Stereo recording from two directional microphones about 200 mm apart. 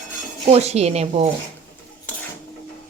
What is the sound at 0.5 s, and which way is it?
Speech, 30° right (ahead or behind).